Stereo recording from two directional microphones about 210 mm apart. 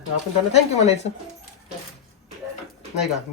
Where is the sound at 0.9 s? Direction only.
30° left (ahead or behind).